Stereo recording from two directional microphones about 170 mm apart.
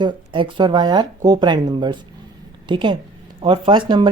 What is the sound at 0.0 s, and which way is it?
Speech, 25° right (ahead or behind).